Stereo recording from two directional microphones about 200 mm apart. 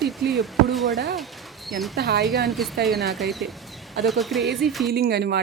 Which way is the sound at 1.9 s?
55° right (ahead or behind).